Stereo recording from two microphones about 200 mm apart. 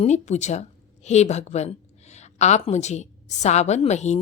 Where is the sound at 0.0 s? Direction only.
35° left (ahead or behind).